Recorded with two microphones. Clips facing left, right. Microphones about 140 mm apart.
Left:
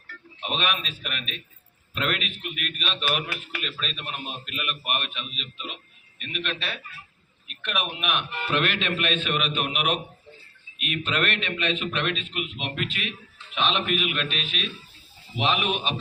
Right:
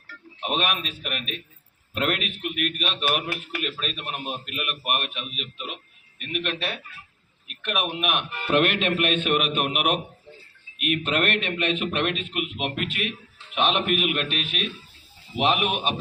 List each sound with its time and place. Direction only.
0.4 s a man's voice: 50° right (ahead or behind)